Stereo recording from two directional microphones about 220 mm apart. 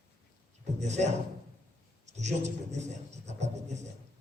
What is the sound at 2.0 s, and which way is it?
Speech, 30° right (ahead or behind).